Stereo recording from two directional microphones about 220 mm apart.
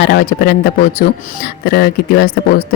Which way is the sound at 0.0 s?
45° left (ahead or behind).